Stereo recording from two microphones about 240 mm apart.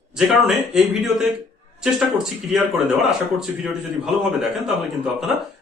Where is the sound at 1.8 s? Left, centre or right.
Centre.